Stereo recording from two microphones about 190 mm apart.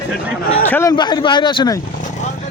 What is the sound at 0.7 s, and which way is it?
Speech, 15° left (ahead or behind).